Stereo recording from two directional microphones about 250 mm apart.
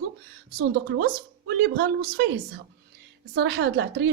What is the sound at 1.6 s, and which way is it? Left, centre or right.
Speech, right.